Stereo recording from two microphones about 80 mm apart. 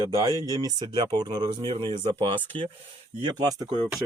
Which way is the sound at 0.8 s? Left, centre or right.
Right.